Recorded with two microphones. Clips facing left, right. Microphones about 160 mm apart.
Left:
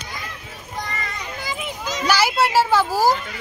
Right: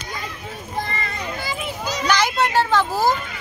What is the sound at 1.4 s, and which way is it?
Children playing, 15° left (ahead or behind).